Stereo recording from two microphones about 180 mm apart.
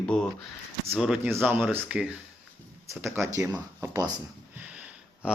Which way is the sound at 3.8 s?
20° right (ahead or behind).